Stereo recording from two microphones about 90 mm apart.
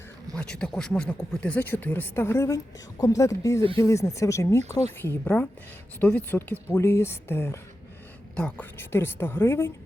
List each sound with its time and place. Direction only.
0.3 s a woman's voice: 10° left (ahead or behind); by 7.6 s 25° left (ahead or behind)
8.4 s a woman's voice: 15° left (ahead or behind)
8.8 s speech: 25° left (ahead or behind)